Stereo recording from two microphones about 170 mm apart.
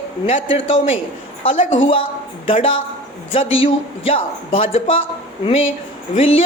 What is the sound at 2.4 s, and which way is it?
A woman's voice, 30° left (ahead or behind).